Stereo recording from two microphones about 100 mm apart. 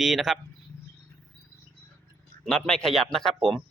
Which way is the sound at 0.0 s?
Centre (ahead or behind).